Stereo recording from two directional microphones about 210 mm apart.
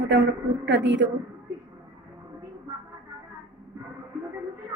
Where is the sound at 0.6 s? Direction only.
60° right (ahead or behind).